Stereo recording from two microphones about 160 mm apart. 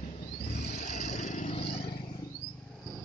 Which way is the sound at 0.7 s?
45° left (ahead or behind).